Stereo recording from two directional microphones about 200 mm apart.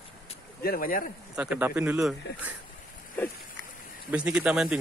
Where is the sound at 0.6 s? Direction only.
45° left (ahead or behind).